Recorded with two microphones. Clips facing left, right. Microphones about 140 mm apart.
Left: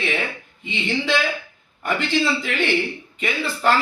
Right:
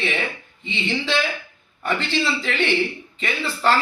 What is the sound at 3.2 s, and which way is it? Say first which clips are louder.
Speech: left 1 dB; 10° left (ahead or behind).